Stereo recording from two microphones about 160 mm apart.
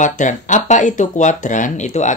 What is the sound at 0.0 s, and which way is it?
Speech, 50° left (ahead or behind).